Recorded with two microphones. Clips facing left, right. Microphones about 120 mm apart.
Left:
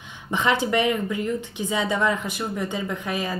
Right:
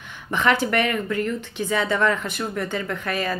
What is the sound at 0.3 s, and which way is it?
Speech, 20° left (ahead or behind).